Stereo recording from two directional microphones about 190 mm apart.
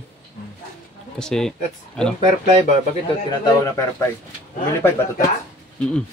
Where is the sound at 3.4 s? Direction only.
15° left (ahead or behind).